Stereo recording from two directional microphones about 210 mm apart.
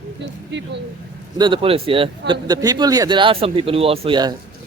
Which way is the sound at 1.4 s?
25° right (ahead or behind).